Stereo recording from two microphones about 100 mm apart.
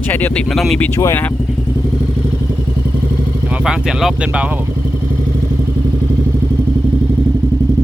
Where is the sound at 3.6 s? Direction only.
5° right (ahead or behind).